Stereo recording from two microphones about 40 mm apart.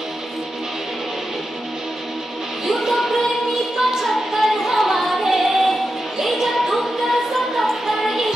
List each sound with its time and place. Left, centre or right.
2.6 s music: centre